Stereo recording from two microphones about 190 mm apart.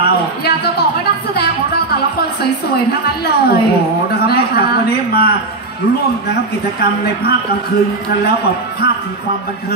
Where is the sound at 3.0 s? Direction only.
55° left (ahead or behind).